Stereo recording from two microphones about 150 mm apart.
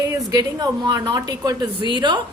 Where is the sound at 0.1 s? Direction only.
25° right (ahead or behind).